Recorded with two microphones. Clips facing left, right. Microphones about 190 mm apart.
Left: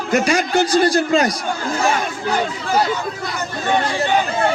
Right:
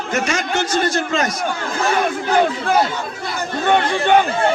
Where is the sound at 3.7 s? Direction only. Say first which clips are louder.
Right 3 dB; 60° right (ahead or behind).